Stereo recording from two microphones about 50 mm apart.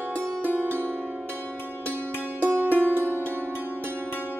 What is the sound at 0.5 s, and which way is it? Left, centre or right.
Music, left.